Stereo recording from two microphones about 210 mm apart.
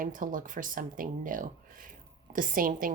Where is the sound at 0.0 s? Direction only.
40° right (ahead or behind).